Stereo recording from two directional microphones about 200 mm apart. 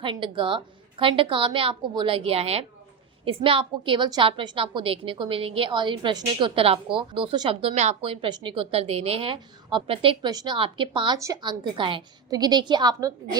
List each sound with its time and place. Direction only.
0.0 s a woman's voice: 25° right (ahead or behind)